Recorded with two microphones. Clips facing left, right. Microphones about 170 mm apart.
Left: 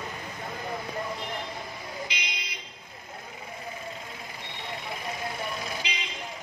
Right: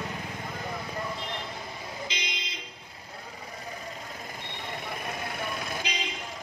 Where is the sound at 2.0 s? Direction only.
20° right (ahead or behind).